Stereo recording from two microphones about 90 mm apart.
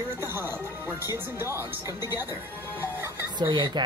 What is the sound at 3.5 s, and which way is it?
Speech, 60° right (ahead or behind).